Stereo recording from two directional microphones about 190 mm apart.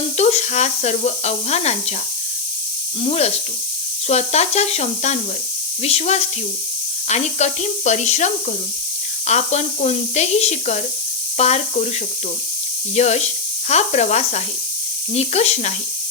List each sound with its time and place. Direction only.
0.2 s speech: 35° left (ahead or behind)
3.0 s speech: 35° left (ahead or behind)
13.0 s speech: 35° left (ahead or behind)